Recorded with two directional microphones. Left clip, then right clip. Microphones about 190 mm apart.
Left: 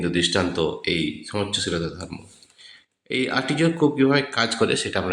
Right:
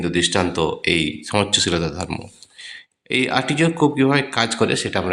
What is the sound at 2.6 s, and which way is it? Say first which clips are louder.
Speech: right 5 dB; 30° right (ahead or behind).